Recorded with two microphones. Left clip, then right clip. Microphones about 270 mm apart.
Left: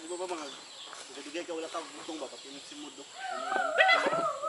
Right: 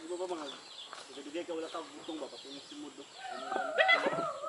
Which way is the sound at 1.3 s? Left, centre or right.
Centre.